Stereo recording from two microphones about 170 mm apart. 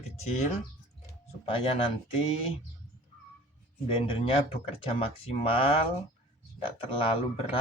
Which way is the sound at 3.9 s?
30° left (ahead or behind).